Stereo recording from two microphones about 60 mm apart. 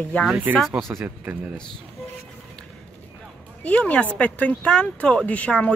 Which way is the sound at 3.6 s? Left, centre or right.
Left.